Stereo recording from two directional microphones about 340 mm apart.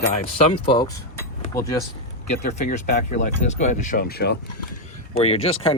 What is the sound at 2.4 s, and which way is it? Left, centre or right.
Speech, centre.